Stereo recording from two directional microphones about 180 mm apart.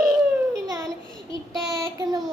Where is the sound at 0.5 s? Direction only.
20° right (ahead or behind).